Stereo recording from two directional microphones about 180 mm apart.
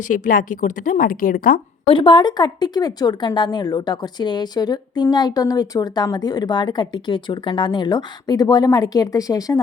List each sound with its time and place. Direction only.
0.0 s a woman's voice: 50° left (ahead or behind)
1.9 s speech: 25° left (ahead or behind)